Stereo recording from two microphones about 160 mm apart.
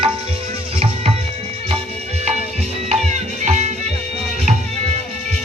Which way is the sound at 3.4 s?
45° right (ahead or behind).